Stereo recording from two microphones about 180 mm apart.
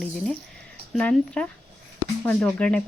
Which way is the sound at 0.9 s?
5° left (ahead or behind).